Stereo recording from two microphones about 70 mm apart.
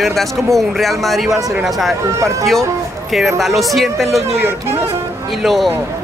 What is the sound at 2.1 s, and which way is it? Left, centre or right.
Speech, right.